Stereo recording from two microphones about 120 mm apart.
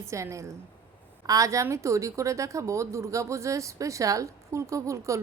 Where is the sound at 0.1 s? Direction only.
25° right (ahead or behind).